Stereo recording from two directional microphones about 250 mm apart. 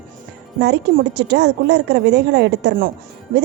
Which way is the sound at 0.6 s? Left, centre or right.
Right.